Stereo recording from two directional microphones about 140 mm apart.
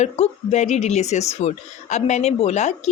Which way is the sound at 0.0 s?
55° left (ahead or behind).